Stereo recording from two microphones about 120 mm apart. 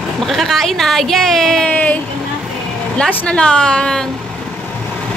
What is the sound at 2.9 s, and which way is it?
A woman's voice, 10° left (ahead or behind).